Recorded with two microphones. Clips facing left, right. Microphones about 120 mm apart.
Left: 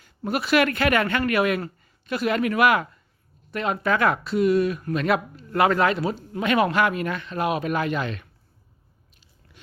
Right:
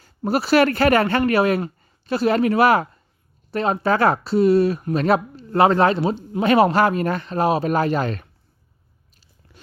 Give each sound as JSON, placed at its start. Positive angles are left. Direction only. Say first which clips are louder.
{"t": 0.0, "sound": "speech", "louder": "right 5 dB", "side_deg": -35}